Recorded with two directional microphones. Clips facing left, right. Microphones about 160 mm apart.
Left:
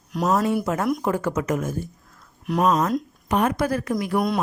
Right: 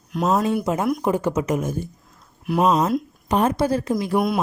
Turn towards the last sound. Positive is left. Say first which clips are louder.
# right 2 dB
turn(degrees=-25)  # may be behind; listen again after turning